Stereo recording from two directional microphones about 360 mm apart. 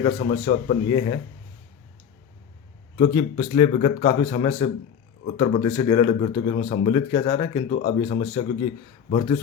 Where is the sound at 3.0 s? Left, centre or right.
Centre.